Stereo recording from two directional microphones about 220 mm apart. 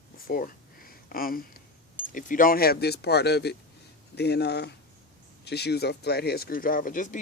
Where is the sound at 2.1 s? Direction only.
40° left (ahead or behind).